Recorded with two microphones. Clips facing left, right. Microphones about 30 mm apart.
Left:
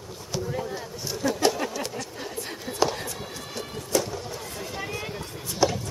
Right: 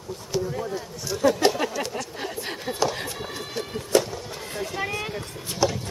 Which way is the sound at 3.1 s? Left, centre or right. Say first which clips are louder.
Right 3 dB; right.